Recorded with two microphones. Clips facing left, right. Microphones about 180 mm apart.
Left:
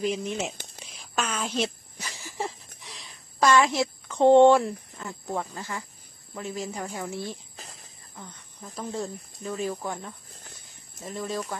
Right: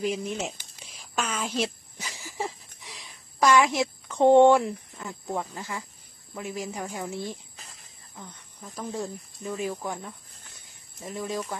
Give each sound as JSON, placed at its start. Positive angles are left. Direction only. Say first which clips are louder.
{"t": 0.0, "sound": "a woman's voice", "louder": "left 1 dB", "side_deg": -10}
{"t": 2.0, "sound": "a sound", "louder": "even", "side_deg": -5}
{"t": 2.9, "sound": "a woman's voice", "louder": "right 1 dB", "side_deg": -10}
{"t": 7.5, "sound": "snake", "louder": "left 4 dB", "side_deg": 35}
{"t": 8.6, "sound": "speech", "louder": "even", "side_deg": 0}